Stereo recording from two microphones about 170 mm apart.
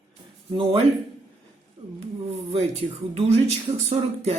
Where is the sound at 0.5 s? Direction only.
30° right (ahead or behind).